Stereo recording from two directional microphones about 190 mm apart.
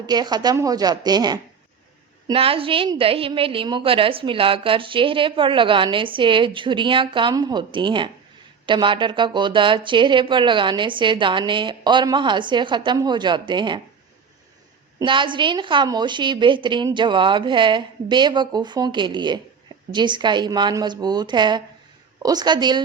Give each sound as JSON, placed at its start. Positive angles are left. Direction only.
{"t": 0.0, "sound": "a woman's voice", "side_deg": -20}
{"t": 14.9, "sound": "a woman's voice", "side_deg": -25}